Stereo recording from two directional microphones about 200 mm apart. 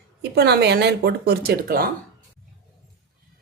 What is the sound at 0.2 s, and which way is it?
Speech, 55° right (ahead or behind).